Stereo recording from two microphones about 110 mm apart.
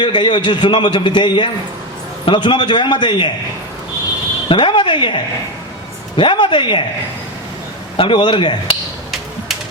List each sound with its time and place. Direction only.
0.0 s a man's voice: 45° left (ahead or behind)
4.4 s a man's voice: 50° left (ahead or behind)
7.9 s a man's voice: 50° left (ahead or behind)